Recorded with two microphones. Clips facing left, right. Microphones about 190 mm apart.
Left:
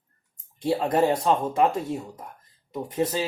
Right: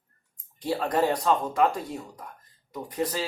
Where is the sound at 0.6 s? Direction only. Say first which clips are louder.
Left 3 dB; 25° left (ahead or behind).